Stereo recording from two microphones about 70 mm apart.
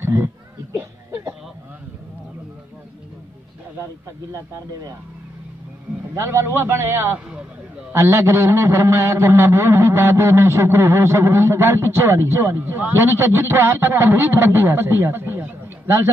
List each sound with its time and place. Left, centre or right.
0.0 s speech: right
6.1 s a man's voice: right